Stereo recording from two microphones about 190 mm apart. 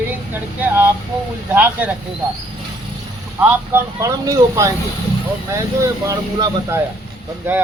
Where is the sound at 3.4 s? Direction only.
10° right (ahead or behind).